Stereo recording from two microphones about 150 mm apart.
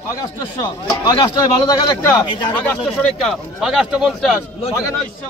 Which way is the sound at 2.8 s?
Centre (ahead or behind).